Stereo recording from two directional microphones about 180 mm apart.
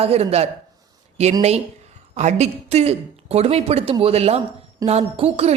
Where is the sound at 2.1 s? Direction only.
40° right (ahead or behind).